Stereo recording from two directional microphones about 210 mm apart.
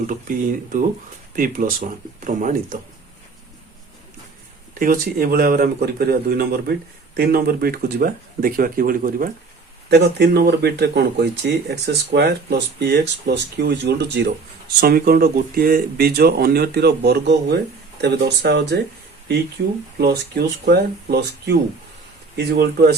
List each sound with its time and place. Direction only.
0.1 s speech: 40° right (ahead or behind)
4.7 s speech: 40° right (ahead or behind)
20.0 s speech: 50° right (ahead or behind)